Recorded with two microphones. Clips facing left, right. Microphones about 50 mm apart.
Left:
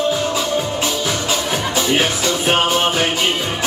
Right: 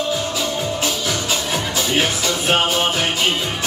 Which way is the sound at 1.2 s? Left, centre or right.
Left.